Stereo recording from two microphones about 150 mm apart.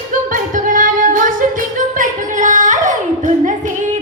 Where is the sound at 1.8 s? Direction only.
60° right (ahead or behind).